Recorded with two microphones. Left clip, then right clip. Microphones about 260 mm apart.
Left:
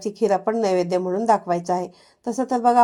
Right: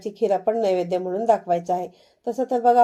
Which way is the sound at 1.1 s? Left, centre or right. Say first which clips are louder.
Left 1 dB; left.